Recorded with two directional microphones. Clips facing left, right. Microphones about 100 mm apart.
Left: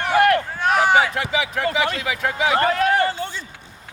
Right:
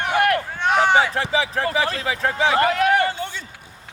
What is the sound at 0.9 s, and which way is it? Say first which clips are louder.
Speech: even; 30° right (ahead or behind).